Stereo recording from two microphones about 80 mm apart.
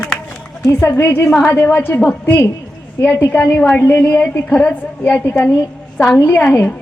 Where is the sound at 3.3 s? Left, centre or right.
Left.